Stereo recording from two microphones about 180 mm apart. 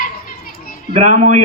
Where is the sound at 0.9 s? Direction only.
40° right (ahead or behind).